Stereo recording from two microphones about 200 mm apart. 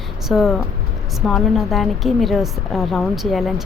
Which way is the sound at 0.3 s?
Centre (ahead or behind).